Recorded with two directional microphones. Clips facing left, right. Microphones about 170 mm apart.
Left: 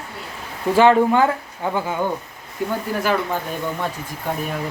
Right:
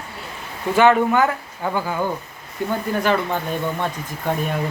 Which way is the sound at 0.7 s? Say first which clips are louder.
Left 1 dB; 30° left (ahead or behind).